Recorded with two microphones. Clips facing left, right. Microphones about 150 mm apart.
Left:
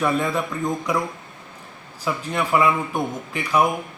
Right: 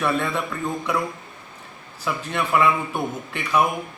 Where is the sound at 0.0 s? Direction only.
15° left (ahead or behind).